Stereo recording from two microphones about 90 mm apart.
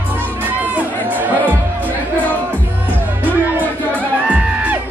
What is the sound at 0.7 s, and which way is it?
Music, 20° right (ahead or behind).